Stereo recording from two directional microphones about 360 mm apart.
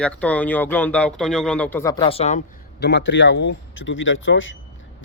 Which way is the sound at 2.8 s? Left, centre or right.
Left.